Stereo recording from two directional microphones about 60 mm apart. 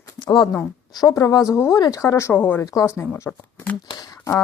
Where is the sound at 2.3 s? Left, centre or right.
Left.